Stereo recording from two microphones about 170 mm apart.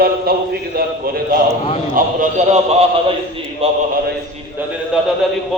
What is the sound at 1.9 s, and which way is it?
A man's voice, 45° right (ahead or behind).